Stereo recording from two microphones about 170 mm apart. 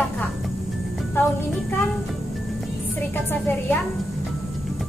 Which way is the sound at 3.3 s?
10° left (ahead or behind).